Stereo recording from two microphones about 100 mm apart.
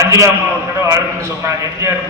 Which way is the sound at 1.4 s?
30° right (ahead or behind).